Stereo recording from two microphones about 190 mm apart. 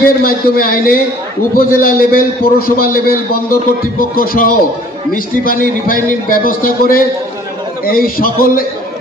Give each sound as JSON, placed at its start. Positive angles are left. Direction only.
{"t": 0.0, "sound": "a man's voice", "side_deg": 50}